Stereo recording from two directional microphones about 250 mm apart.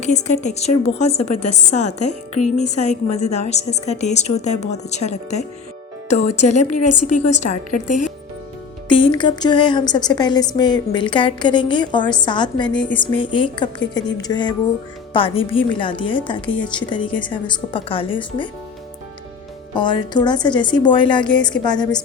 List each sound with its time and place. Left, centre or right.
0.0 s a woman's voice: left
9.0 s a woman's voice: centre
19.7 s a woman's voice: centre